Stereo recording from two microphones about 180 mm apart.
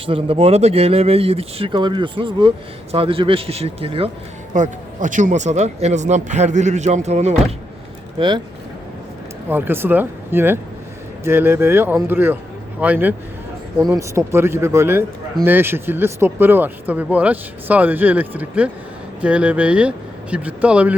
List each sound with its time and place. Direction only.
0.0 s speech: 30° right (ahead or behind)
4.5 s speech: 45° right (ahead or behind)
9.5 s speech: 10° right (ahead or behind)